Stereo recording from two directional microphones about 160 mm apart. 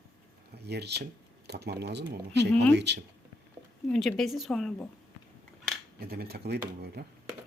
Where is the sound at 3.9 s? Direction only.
5° left (ahead or behind).